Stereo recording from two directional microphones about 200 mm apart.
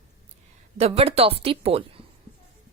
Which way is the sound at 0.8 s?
30° right (ahead or behind).